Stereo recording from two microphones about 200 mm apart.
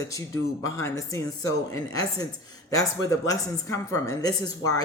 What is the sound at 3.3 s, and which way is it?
Speech, 15° left (ahead or behind).